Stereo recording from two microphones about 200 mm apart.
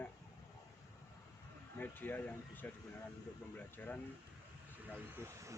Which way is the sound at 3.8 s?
10° left (ahead or behind).